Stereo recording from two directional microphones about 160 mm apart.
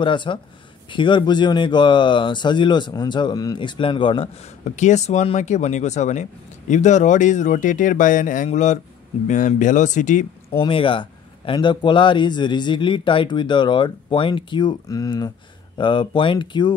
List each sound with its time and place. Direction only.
0.0 s speech: 30° left (ahead or behind); by 10.2 s 50° left (ahead or behind)
10.6 s speech: 30° left (ahead or behind)